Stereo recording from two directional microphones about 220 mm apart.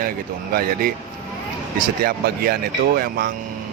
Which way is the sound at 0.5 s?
40° right (ahead or behind).